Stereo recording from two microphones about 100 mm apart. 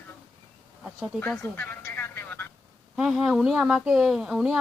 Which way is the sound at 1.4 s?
15° left (ahead or behind).